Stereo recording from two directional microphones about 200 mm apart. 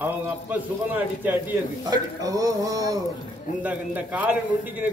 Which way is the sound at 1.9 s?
15° right (ahead or behind).